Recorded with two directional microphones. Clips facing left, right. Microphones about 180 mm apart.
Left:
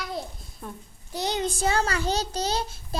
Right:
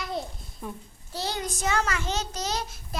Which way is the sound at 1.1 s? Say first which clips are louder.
Left 4 dB; 20° left (ahead or behind).